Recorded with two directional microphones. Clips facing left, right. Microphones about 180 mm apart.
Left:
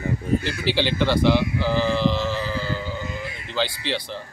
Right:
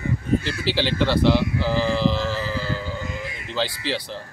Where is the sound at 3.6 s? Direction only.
5° right (ahead or behind).